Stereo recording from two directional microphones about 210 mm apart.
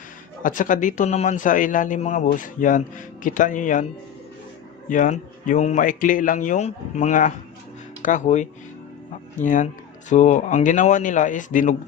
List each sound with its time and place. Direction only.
0.4 s speech: 40° left (ahead or behind)
4.8 s speech: 35° left (ahead or behind)